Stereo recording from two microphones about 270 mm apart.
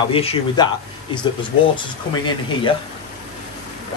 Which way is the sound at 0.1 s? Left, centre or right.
Left.